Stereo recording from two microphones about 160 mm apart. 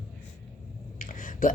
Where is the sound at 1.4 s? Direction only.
60° left (ahead or behind).